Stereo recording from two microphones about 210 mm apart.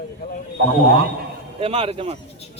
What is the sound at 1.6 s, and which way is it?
Speech, 30° right (ahead or behind).